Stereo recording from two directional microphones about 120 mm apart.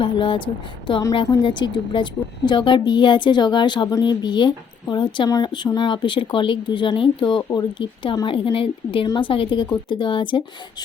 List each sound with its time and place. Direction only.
0.0 s a woman's voice: 45° left (ahead or behind)
8.5 s a woman's voice: 50° left (ahead or behind)